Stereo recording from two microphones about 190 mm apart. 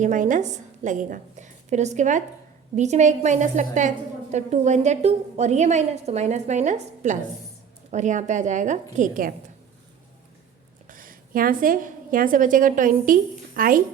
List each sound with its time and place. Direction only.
0.0 s a woman's voice: 45° right (ahead or behind)
10.8 s a woman's voice: 45° right (ahead or behind)